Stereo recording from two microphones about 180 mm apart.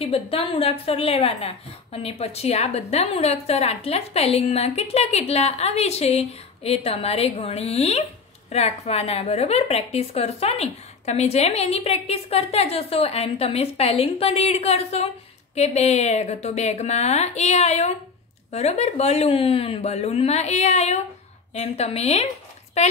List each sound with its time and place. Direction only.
0.0 s a woman's voice: 35° left (ahead or behind)